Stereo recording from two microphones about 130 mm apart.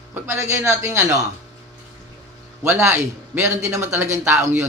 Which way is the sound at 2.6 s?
20° right (ahead or behind).